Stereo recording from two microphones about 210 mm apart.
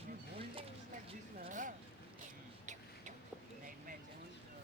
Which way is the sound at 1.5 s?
35° right (ahead or behind).